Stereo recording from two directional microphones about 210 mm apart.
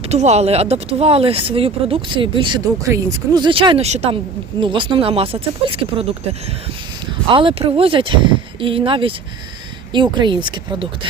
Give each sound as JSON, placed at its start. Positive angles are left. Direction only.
{"t": 0.1, "sound": "speech", "side_deg": -30}
{"t": 7.3, "sound": "speech", "side_deg": -25}